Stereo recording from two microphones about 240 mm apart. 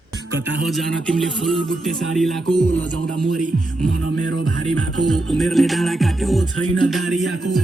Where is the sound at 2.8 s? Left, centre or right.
Right.